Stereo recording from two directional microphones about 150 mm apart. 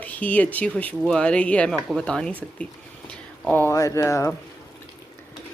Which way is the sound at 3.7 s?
20° left (ahead or behind).